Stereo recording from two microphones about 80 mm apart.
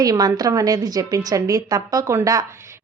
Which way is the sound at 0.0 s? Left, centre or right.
Right.